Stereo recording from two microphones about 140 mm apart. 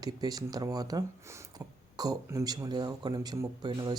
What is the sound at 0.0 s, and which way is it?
Speech, 25° right (ahead or behind).